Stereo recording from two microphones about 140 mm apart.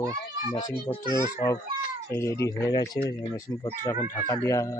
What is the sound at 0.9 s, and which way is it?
Speech, 35° left (ahead or behind).